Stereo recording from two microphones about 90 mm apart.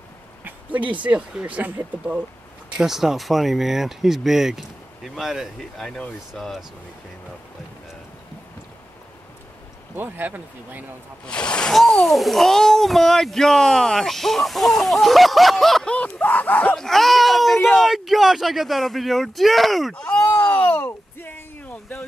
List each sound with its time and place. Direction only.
0.4 s a sound: 20° right (ahead or behind)
1.0 s a child's voice: 15° right (ahead or behind); by 6.6 s 5° left (ahead or behind)
9.9 s speech: 20° right (ahead or behind)
11.2 s speech: 10° left (ahead or behind)
11.7 s a child's voice: centre (ahead or behind)
15.9 s speech: 15° left (ahead or behind)
16.7 s a child's voice: 5° left (ahead or behind)
20.3 s a sound: 20° left (ahead or behind)